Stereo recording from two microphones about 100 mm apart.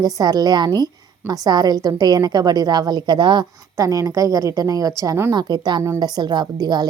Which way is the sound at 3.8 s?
35° right (ahead or behind).